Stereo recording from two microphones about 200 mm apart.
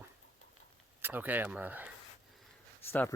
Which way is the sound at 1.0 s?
10° right (ahead or behind).